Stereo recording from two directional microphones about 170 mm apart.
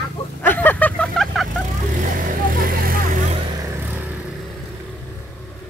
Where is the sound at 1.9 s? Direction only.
50° right (ahead or behind).